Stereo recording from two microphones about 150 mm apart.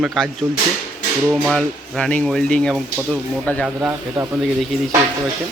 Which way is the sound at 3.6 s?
15° right (ahead or behind).